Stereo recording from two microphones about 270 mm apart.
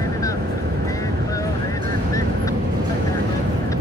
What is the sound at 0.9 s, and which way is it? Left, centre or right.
Vehicle, centre.